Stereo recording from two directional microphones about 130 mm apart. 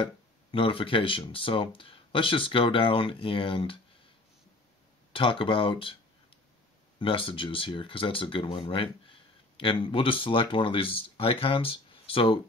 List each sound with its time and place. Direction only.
0.0 s speech: 40° left (ahead or behind)
5.1 s speech: 40° left (ahead or behind)